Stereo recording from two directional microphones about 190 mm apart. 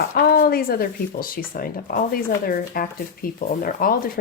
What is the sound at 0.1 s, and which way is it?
Speech, 50° left (ahead or behind).